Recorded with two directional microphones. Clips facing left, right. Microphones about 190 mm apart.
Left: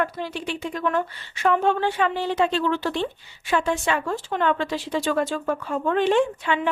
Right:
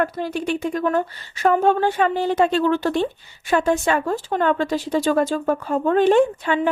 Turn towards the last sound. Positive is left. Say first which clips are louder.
# right 4 dB
turn(degrees=-45)  # may be behind; listen again after turning